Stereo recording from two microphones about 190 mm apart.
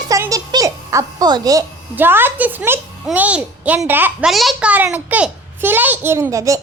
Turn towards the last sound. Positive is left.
turn(degrees=-15)  # may be behind; listen again after turning